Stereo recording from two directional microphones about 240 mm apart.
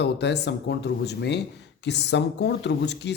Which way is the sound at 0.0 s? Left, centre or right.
Left.